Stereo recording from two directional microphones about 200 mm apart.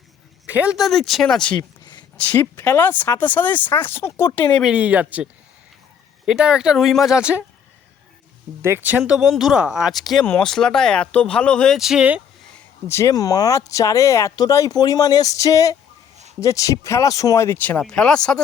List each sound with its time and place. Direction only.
0.4 s speech: 5° right (ahead or behind)
1.5 s a sound: 20° left (ahead or behind)
2.1 s speech: 10° left (ahead or behind)
4.6 s speech: 5° right (ahead or behind)
8.6 s speech: 10° right (ahead or behind)
12.9 s speech: 15° left (ahead or behind)